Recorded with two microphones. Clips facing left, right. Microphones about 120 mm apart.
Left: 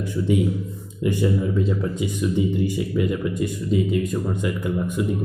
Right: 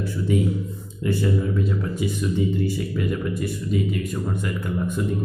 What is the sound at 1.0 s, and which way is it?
Speech, 15° left (ahead or behind).